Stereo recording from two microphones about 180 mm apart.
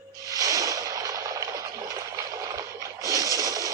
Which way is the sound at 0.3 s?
20° right (ahead or behind).